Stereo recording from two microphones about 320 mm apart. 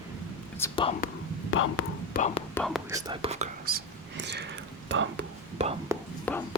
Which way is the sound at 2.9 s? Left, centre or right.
Centre.